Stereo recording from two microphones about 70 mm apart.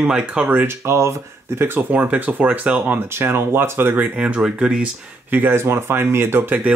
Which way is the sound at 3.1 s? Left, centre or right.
Right.